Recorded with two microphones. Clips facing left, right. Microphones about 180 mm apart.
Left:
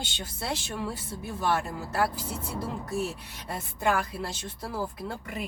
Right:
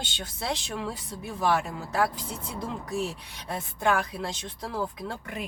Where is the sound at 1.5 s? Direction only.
5° left (ahead or behind).